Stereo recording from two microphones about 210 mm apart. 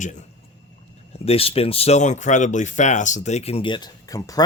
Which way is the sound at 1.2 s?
30° left (ahead or behind).